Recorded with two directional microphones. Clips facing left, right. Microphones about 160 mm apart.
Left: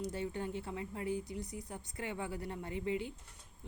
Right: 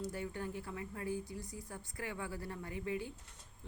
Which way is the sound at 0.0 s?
20° left (ahead or behind).